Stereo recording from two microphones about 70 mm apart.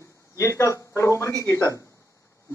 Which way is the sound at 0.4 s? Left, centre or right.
Left.